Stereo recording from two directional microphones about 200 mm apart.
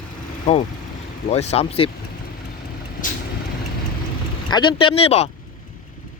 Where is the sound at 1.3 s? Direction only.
30° left (ahead or behind).